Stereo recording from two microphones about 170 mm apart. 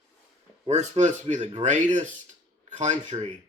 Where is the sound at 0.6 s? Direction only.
40° right (ahead or behind).